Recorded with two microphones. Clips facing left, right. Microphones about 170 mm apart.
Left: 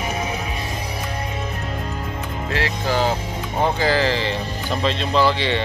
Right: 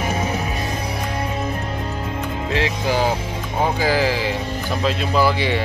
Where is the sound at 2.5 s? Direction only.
15° right (ahead or behind).